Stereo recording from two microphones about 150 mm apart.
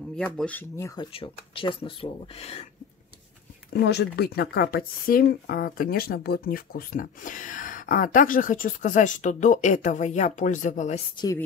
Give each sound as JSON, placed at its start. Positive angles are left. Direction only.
{"t": 0.1, "sound": "speech", "side_deg": 5}
{"t": 0.9, "sound": "speech", "side_deg": 35}
{"t": 3.7, "sound": "speech", "side_deg": 90}